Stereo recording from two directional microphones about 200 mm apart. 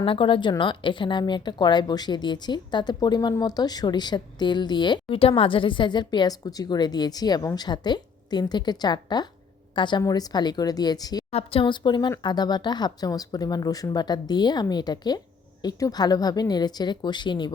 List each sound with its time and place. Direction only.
0.0 s speech: 25° left (ahead or behind)
11.3 s speech: 30° left (ahead or behind)